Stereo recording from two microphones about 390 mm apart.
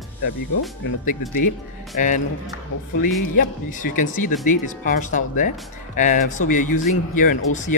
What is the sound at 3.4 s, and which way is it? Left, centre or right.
Speech, centre.